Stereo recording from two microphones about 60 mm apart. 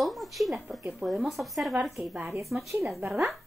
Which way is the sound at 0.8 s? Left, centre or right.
Centre.